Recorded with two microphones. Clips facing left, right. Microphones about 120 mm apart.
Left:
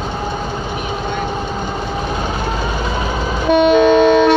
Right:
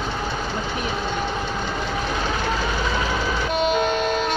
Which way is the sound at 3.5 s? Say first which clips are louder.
Left 12 dB; 90° left.